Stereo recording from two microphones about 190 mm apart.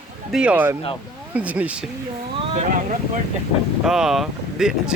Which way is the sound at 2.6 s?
45° right (ahead or behind).